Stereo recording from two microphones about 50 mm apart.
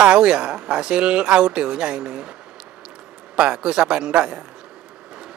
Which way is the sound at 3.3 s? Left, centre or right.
Right.